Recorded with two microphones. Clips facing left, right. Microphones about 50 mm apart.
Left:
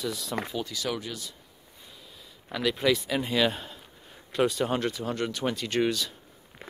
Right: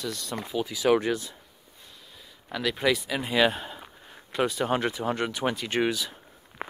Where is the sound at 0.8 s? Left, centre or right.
Right.